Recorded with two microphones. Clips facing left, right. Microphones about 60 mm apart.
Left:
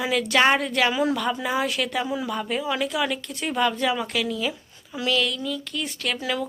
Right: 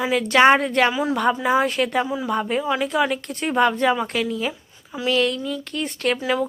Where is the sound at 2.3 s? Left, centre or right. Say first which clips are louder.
Right 4 dB; right.